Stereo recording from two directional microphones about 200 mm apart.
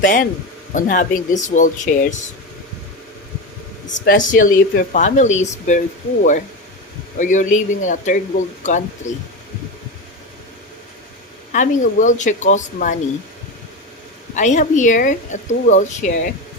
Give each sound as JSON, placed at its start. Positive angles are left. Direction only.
{"t": 0.0, "sound": "speech", "side_deg": 40}
{"t": 3.8, "sound": "speech", "side_deg": 45}
{"t": 7.2, "sound": "speech", "side_deg": 40}
{"t": 11.5, "sound": "speech", "side_deg": 40}
{"t": 14.3, "sound": "speech", "side_deg": 40}